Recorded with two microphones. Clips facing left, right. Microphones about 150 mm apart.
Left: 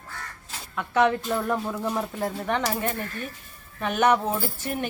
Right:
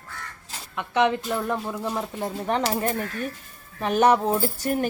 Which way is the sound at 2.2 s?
30° right (ahead or behind).